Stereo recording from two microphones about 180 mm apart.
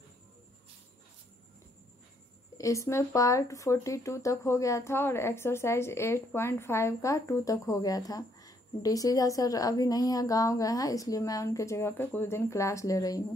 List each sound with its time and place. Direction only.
2.5 s speech: 15° left (ahead or behind)